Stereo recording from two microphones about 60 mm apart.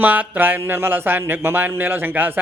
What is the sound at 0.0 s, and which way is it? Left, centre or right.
Speech, right.